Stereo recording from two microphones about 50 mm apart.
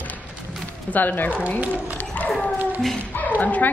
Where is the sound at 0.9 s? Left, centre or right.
Left.